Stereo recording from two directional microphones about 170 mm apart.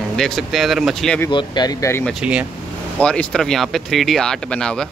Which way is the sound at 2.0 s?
5° right (ahead or behind).